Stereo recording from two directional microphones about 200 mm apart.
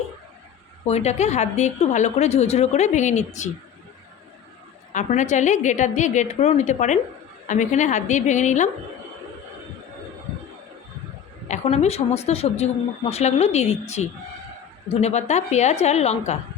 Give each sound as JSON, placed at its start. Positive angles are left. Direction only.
{"t": 0.9, "sound": "a woman's voice", "side_deg": 35}
{"t": 4.9, "sound": "a woman's voice", "side_deg": 35}
{"t": 11.4, "sound": "a woman's voice", "side_deg": 35}